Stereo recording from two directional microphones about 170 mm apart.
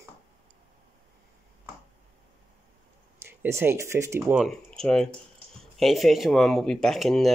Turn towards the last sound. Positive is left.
turn(degrees=0)  # may be behind; listen again after turning